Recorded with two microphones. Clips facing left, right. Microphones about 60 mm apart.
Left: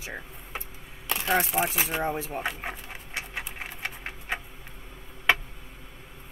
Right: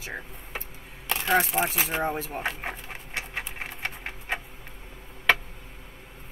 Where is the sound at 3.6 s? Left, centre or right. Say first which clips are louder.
Right 1 dB; centre.